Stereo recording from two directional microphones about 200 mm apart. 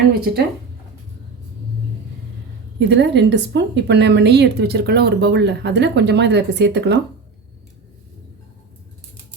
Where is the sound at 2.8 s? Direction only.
60° right (ahead or behind).